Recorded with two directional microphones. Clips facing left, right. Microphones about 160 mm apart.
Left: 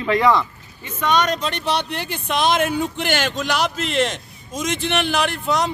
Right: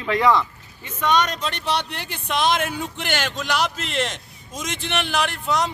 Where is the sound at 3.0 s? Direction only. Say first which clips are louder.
Left 4 dB; 10° left (ahead or behind).